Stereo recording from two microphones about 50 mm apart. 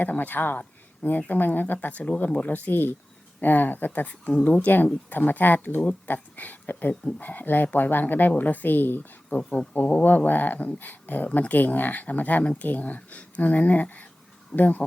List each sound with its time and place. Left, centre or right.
0.0 s speech: left